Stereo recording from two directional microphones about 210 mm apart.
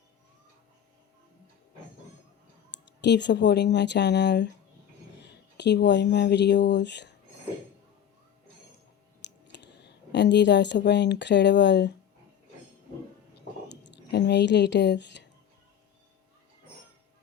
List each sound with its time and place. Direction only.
2.7 s speech: 55° left (ahead or behind)
9.2 s speech: 55° left (ahead or behind)
13.7 s speech: 55° left (ahead or behind)